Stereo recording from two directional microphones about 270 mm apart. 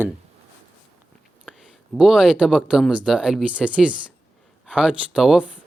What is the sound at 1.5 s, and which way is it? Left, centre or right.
Speech, centre.